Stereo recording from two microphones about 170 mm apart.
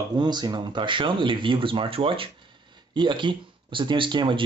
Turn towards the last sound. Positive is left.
turn(degrees=-30)  # may be behind; listen again after turning